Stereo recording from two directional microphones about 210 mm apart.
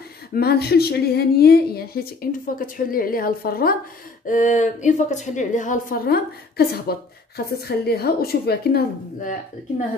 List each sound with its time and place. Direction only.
0.3 s a woman's voice: 50° left (ahead or behind)